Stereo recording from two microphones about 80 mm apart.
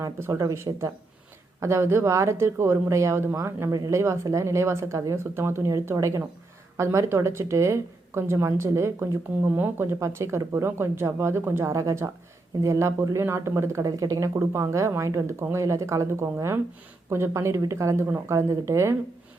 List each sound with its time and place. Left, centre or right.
0.0 s speech: right
9.5 s speech: right